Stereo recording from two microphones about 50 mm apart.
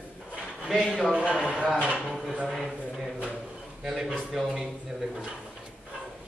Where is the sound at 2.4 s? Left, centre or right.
Centre.